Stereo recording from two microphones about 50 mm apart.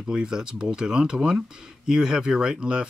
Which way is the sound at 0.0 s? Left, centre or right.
Centre.